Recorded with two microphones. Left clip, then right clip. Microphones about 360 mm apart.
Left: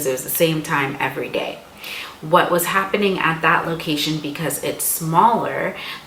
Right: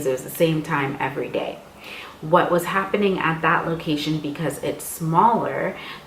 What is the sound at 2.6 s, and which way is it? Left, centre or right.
A woman's voice, centre.